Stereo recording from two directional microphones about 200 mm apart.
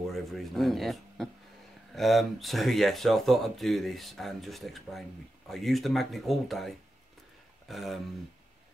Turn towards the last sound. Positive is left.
turn(degrees=0)  # may be behind; listen again after turning